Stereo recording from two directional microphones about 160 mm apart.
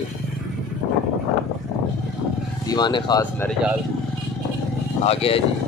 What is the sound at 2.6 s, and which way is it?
Speech, 25° left (ahead or behind).